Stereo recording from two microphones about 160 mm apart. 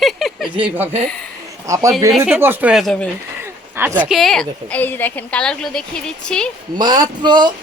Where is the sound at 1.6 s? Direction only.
20° right (ahead or behind).